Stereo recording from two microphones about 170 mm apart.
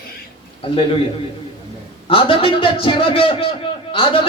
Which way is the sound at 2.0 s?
30° left (ahead or behind).